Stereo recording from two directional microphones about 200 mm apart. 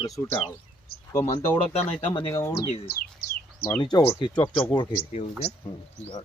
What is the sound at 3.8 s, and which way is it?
Speech, 25° left (ahead or behind).